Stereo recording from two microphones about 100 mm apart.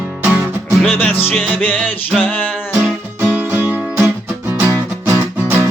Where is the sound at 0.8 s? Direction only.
20° left (ahead or behind).